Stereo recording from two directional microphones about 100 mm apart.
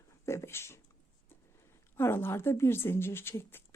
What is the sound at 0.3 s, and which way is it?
Speech, 25° left (ahead or behind).